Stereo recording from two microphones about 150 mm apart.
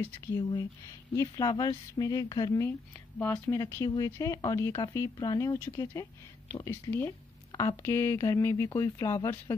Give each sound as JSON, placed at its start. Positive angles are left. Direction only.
{"t": 0.4, "sound": "a woman's voice", "side_deg": 30}